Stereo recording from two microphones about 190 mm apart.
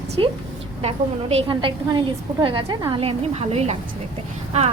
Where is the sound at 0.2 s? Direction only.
25° right (ahead or behind).